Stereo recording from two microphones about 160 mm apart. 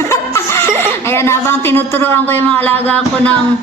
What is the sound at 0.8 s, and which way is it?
A woman's voice, 15° left (ahead or behind).